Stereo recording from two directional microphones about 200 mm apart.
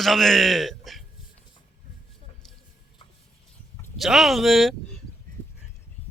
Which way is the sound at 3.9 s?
Centre (ahead or behind).